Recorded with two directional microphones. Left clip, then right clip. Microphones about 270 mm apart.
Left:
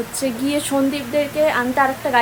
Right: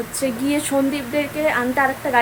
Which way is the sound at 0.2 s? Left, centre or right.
Centre.